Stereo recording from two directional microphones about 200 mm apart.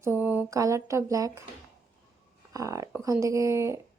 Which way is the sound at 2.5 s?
15° right (ahead or behind).